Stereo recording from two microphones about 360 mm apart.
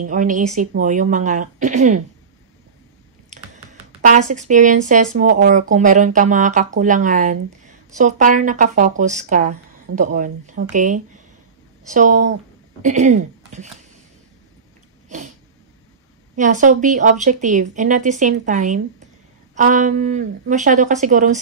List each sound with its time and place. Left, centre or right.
0.1 s speech: right
4.0 s speech: right
15.0 s a sound: centre
16.3 s speech: right